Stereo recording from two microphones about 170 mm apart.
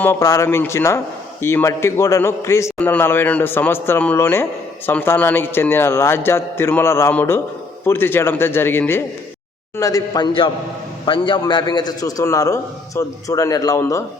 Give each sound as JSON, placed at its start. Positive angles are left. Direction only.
{"t": 0.0, "sound": "a man's voice", "side_deg": 15}